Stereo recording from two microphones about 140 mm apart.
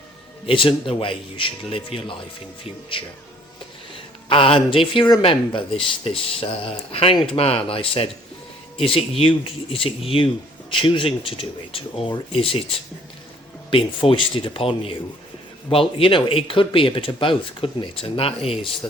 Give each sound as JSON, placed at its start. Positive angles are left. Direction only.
{"t": 0.4, "sound": "speech", "side_deg": 40}
{"t": 4.3, "sound": "speech", "side_deg": 40}
{"t": 13.7, "sound": "speech", "side_deg": 40}